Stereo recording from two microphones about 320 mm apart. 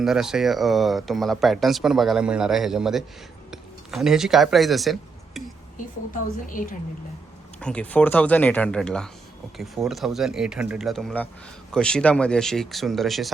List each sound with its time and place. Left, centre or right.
0.0 s speech: centre
6.5 s a woman's voice: left
7.6 s speech: centre